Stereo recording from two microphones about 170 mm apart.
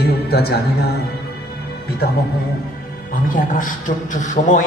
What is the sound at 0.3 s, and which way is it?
Speech, 70° left (ahead or behind).